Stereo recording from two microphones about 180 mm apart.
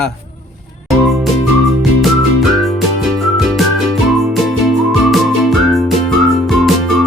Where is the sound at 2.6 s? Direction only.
Centre (ahead or behind).